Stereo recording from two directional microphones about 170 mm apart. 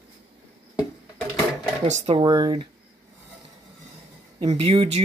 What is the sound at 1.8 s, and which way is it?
Speech, 40° right (ahead or behind).